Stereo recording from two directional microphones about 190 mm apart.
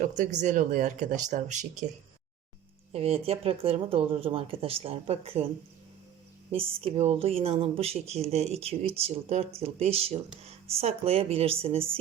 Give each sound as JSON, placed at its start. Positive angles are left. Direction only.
{"t": 0.0, "sound": "speech", "side_deg": -40}
{"t": 2.9, "sound": "speech", "side_deg": -30}
{"t": 6.5, "sound": "speech", "side_deg": -30}